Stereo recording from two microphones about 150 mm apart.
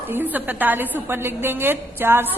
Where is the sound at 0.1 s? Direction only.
10° right (ahead or behind).